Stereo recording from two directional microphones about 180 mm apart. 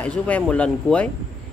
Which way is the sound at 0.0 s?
10° left (ahead or behind).